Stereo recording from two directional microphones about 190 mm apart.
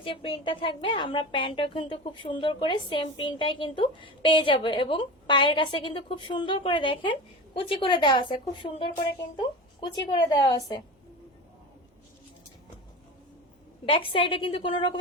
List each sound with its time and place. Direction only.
0.0 s a woman's voice: 30° left (ahead or behind)
13.9 s a woman's voice: 30° left (ahead or behind)